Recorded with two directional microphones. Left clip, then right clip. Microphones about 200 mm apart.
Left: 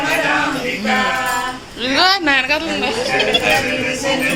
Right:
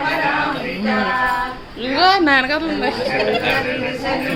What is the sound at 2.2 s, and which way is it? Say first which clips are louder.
Speech: even; 35° right (ahead or behind).